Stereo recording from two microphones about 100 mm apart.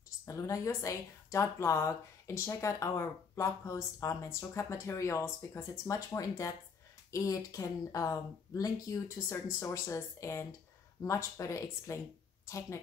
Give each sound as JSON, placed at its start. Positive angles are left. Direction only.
{"t": 0.2, "sound": "a woman's voice", "side_deg": 30}